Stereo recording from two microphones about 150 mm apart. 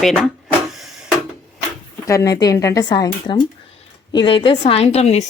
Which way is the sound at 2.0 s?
20° left (ahead or behind).